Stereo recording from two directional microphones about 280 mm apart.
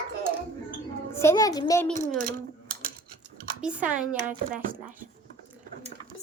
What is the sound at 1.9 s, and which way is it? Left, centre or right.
Speech, right.